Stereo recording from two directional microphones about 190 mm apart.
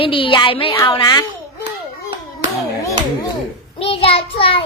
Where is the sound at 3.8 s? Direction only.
30° left (ahead or behind).